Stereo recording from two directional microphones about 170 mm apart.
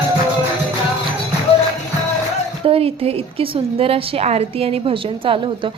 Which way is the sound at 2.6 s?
35° right (ahead or behind).